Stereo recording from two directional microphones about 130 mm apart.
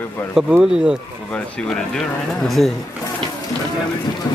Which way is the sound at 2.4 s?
Centre (ahead or behind).